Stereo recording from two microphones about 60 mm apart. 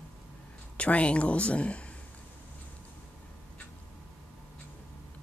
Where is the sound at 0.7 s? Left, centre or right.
Left.